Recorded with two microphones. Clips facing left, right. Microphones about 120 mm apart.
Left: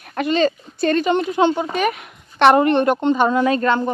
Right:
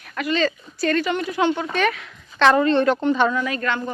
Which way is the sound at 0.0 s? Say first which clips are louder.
Left 5 dB; 35° left (ahead or behind).